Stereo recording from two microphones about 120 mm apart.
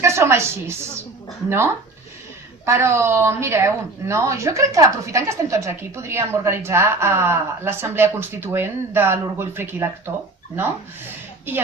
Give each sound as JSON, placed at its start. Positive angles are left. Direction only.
{"t": 0.0, "sound": "a woman's voice", "side_deg": -20}
{"t": 11.5, "sound": "a woman's voice", "side_deg": -15}